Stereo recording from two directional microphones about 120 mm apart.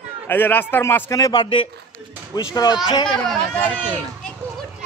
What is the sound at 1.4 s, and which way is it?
Speech, 45° left (ahead or behind).